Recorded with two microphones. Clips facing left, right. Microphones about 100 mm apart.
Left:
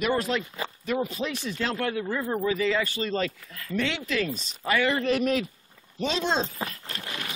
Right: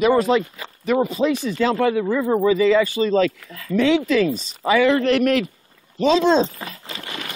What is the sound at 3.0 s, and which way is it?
Speech, 90° right.